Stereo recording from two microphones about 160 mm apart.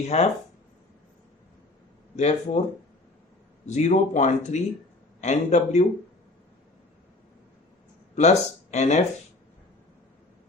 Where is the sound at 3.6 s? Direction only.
45° left (ahead or behind).